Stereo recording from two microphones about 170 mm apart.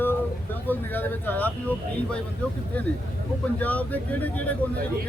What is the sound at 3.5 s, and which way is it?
Speech, 10° left (ahead or behind).